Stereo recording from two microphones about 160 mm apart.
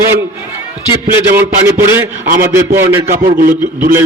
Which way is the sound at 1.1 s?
15° right (ahead or behind).